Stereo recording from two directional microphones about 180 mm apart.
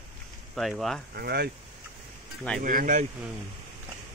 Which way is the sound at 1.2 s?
60° right (ahead or behind).